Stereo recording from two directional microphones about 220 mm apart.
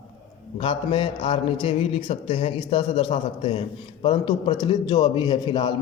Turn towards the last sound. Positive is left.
turn(degrees=20)  # may be behind; listen again after turning